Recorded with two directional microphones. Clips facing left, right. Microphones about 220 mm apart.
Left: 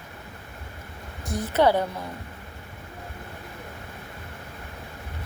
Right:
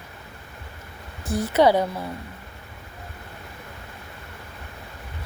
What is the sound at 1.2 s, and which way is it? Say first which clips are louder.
Speech: right 3 dB; 10° right (ahead or behind).